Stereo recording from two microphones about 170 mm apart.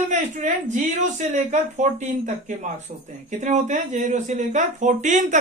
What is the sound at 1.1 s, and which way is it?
Speech, 45° right (ahead or behind).